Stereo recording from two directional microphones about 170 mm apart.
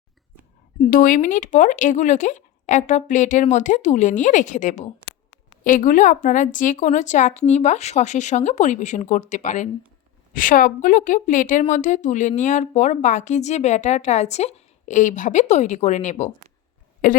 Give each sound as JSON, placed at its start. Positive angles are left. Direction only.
{"t": 0.8, "sound": "speech", "side_deg": 55}